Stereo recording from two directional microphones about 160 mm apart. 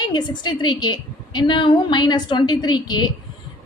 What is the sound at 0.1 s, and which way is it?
A woman's voice, 30° left (ahead or behind).